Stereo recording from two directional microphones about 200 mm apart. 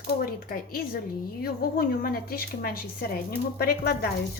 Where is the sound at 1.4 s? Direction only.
50° left (ahead or behind).